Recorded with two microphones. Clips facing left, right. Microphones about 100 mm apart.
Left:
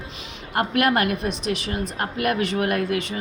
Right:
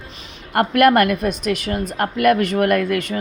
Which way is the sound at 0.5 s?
55° right (ahead or behind).